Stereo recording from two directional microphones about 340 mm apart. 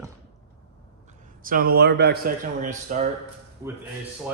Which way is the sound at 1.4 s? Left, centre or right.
Right.